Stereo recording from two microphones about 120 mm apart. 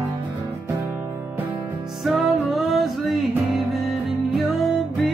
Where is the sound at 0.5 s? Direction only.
25° right (ahead or behind).